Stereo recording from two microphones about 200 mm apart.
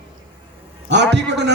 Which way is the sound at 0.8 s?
60° right (ahead or behind).